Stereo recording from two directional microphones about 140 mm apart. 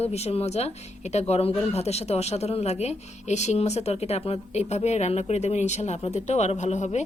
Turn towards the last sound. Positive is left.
turn(degrees=55)  # may be behind; listen again after turning